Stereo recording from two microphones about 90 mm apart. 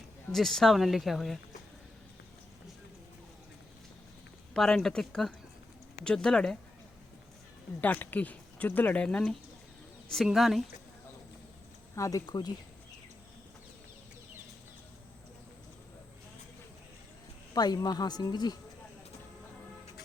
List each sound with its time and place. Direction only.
0.3 s speech: 5° left (ahead or behind)
4.5 s speech: 5° left (ahead or behind)
7.8 s speech: 20° left (ahead or behind)
9.0 s speech: 10° left (ahead or behind)
11.9 s speech: 35° left (ahead or behind)
12.2 s a woman's voice: 55° left (ahead or behind)
17.5 s a woman's voice: 45° left (ahead or behind)